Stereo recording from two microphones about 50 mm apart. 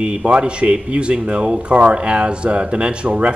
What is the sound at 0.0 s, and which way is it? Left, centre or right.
Speech, right.